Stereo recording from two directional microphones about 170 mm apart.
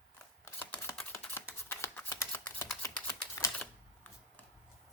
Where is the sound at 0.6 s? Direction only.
10° left (ahead or behind).